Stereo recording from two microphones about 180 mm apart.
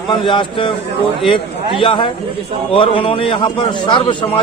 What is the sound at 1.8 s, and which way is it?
A man's voice, 25° left (ahead or behind).